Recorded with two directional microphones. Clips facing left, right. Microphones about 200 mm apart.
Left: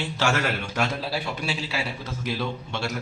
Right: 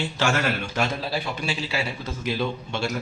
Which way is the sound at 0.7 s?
5° left (ahead or behind).